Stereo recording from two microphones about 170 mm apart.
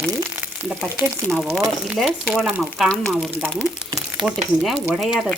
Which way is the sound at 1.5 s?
Centre (ahead or behind).